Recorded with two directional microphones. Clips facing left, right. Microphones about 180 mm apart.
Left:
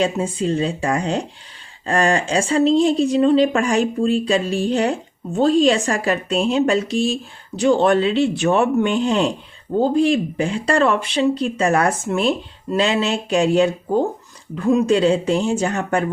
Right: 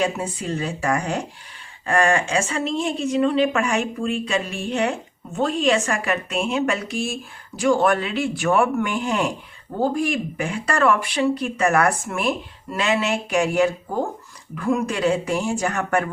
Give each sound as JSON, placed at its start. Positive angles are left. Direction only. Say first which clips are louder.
{"t": 0.0, "sound": "speech", "louder": "left 4 dB", "side_deg": 25}